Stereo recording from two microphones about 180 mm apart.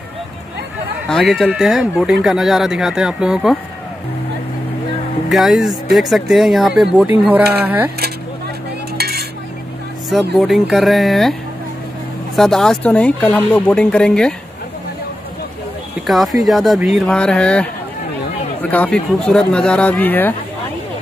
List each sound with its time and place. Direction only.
1.0 s speech: centre (ahead or behind)
5.3 s speech: centre (ahead or behind)
8.9 s cutlery: 60° right (ahead or behind)
10.3 s speech: centre (ahead or behind)
12.4 s speech: centre (ahead or behind)
16.1 s speech: centre (ahead or behind)